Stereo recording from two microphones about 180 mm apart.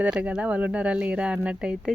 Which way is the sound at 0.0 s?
5° right (ahead or behind).